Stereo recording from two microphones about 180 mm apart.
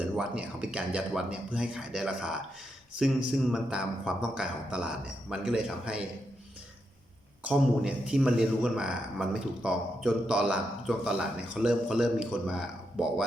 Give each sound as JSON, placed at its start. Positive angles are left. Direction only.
{"t": 0.0, "sound": "a man's voice", "side_deg": -5}
{"t": 7.4, "sound": "a man's voice", "side_deg": -5}